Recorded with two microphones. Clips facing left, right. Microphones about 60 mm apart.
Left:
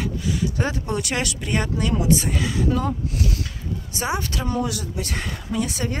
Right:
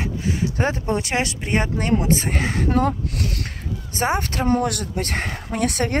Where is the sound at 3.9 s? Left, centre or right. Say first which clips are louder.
Right 4 dB; right.